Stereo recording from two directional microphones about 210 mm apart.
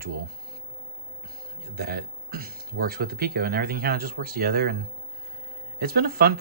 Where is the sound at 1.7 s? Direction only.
50° right (ahead or behind).